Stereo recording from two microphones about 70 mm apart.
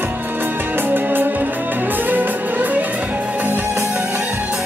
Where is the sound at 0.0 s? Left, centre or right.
Right.